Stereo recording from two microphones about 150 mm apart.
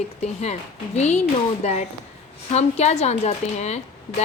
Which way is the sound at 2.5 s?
45° left (ahead or behind).